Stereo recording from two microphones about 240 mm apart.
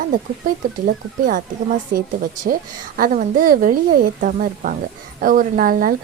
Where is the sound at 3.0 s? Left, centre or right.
Right.